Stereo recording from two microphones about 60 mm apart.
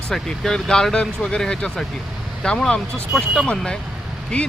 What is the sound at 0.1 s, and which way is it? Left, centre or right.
Speech, centre.